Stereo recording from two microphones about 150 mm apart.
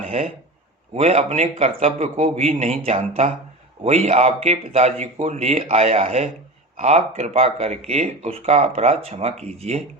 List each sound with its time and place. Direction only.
0.9 s speech: 45° right (ahead or behind)